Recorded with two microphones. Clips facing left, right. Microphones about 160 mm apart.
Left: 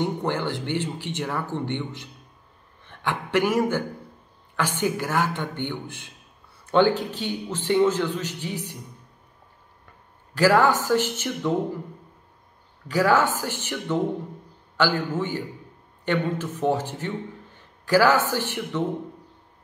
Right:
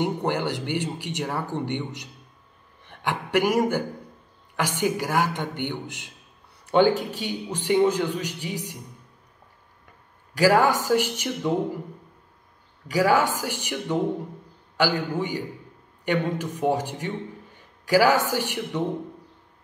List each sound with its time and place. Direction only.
0.0 s speech: 15° right (ahead or behind)
10.3 s speech: 15° right (ahead or behind)
12.8 s a man's voice: 15° right (ahead or behind)